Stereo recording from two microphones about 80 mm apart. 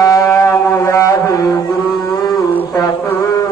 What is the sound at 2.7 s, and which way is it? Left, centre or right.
Music, left.